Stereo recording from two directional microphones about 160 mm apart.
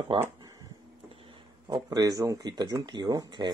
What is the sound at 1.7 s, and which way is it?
Speech, 25° right (ahead or behind).